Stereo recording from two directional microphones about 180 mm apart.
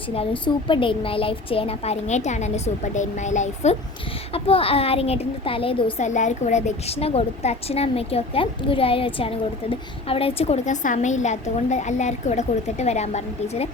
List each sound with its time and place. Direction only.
0.2 s a woman's voice: 30° left (ahead or behind)